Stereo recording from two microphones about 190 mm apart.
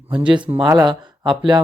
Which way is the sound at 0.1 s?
25° right (ahead or behind).